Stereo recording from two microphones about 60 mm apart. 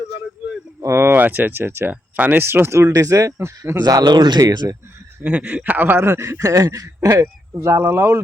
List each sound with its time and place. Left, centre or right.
0.8 s a sound: right
1.0 s speech: right
1.9 s speech: right
2.9 s speech: right
3.8 s speech: right
5.2 s speech: right
5.7 s speech: right
7.2 s speech: right